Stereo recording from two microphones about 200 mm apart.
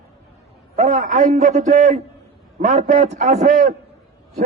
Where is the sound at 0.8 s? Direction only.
40° right (ahead or behind).